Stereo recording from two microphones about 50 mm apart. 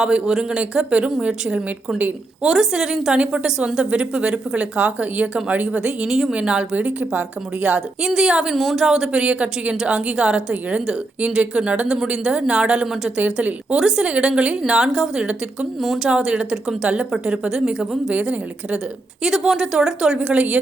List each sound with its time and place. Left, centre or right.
0.0 s a woman's voice: centre
2.4 s a woman's voice: centre
6.1 s speech: centre
6.3 s a woman's voice: right
8.0 s speech: centre
9.1 s a woman's voice: right
16.0 s speech: right
18.1 s a woman's voice: right
19.5 s speech: centre
20.1 s a woman's voice: right